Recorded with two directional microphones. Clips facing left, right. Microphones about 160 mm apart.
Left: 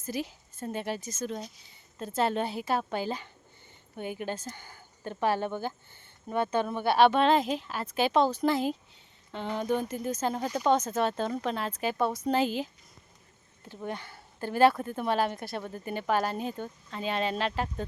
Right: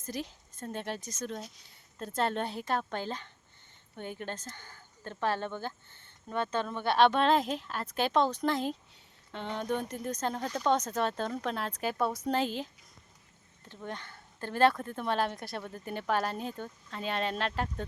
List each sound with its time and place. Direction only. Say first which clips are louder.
0.0 s speech: left 4 dB; 5° left (ahead or behind)
13.8 s speech: left 4 dB; 10° left (ahead or behind)